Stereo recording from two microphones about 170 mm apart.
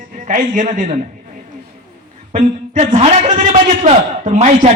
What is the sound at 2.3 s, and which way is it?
A man's voice, 50° right (ahead or behind).